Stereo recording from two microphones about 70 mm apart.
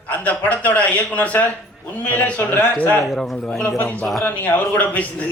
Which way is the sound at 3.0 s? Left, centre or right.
Centre.